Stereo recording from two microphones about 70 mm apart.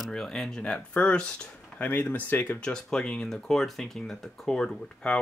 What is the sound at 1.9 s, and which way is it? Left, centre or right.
Speech, left.